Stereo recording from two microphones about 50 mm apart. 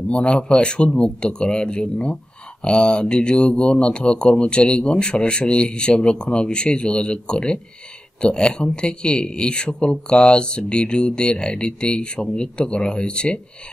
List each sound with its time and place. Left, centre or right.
0.1 s speech: left